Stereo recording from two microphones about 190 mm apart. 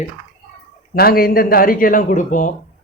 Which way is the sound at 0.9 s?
50° left (ahead or behind).